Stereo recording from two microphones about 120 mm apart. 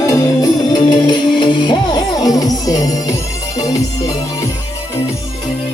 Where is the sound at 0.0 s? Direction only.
25° left (ahead or behind).